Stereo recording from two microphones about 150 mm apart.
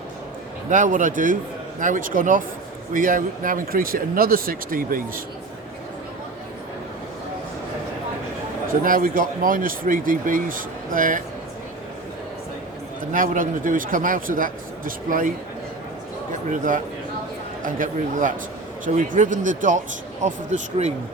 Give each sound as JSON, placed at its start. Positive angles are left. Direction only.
{"t": 0.7, "sound": "speech", "side_deg": -60}
{"t": 8.7, "sound": "speech", "side_deg": -65}
{"t": 13.1, "sound": "speech", "side_deg": -60}
{"t": 16.5, "sound": "speech", "side_deg": -60}